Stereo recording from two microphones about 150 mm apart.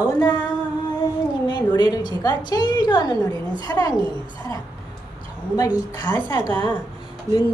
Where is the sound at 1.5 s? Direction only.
30° left (ahead or behind).